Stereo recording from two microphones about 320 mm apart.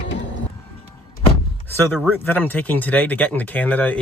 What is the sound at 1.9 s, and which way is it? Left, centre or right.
Speech, centre.